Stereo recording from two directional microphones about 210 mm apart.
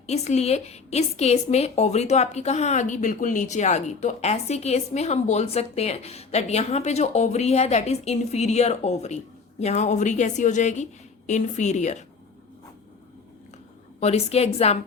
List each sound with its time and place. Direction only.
0.1 s a woman's voice: 30° left (ahead or behind)
14.0 s a woman's voice: 30° left (ahead or behind)